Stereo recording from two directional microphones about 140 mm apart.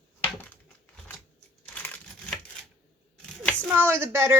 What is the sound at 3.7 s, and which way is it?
Speech, 15° right (ahead or behind).